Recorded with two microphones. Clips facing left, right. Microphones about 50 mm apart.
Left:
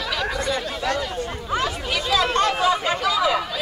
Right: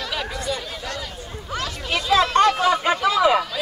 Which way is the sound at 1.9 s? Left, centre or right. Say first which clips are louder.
Right 4 dB; right.